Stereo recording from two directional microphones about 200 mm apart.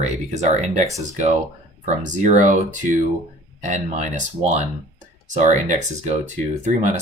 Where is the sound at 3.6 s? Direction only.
35° right (ahead or behind).